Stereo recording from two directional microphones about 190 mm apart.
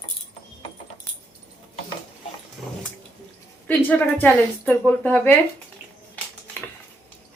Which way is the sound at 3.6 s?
10° left (ahead or behind).